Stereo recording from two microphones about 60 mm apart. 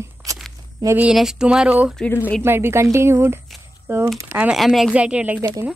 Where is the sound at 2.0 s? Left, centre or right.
Centre.